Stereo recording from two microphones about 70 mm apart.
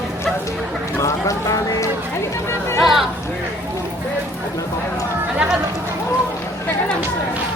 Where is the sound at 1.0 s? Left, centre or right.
Left.